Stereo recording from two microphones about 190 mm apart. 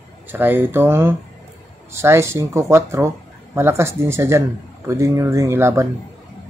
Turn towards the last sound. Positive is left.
turn(degrees=-15)  # may be behind; listen again after turning